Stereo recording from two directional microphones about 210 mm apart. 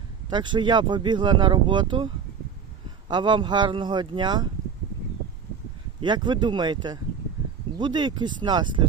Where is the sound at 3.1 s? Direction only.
20° right (ahead or behind).